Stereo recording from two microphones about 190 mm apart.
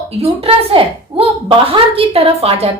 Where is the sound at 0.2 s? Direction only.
30° right (ahead or behind).